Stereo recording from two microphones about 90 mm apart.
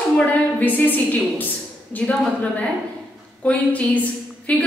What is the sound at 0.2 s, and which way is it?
A woman's voice, 15° left (ahead or behind).